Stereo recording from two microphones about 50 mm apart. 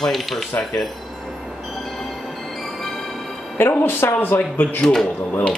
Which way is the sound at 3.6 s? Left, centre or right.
Left.